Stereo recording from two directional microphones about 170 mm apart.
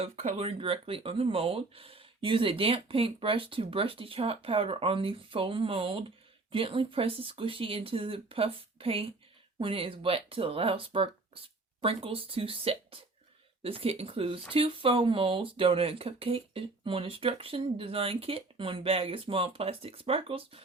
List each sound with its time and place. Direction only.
0.0 s speech: 40° right (ahead or behind)